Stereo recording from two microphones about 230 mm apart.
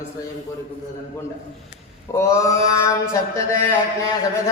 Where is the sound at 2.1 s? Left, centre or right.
Centre.